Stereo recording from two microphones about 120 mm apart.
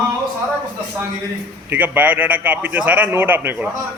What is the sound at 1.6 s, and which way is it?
A man's voice, 15° right (ahead or behind).